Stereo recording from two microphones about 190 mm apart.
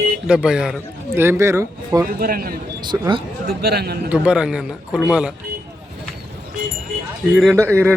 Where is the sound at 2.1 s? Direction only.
50° right (ahead or behind).